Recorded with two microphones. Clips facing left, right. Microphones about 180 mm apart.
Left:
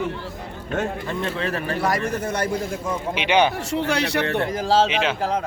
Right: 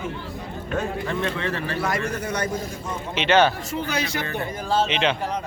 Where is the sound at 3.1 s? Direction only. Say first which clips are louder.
Right 1 dB; 15° left (ahead or behind).